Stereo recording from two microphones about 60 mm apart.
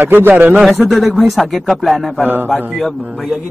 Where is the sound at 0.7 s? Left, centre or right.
Centre.